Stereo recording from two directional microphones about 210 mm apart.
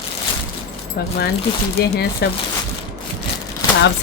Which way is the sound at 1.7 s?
50° left (ahead or behind).